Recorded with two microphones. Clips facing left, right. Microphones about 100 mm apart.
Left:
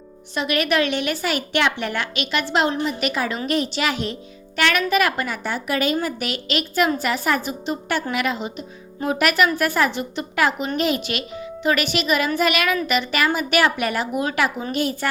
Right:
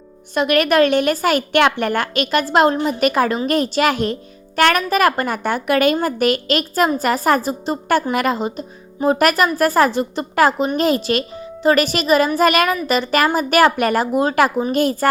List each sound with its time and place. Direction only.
0.3 s a woman's voice: 50° right (ahead or behind)
14.1 s speech: 35° right (ahead or behind)
14.7 s a woman's voice: 45° right (ahead or behind)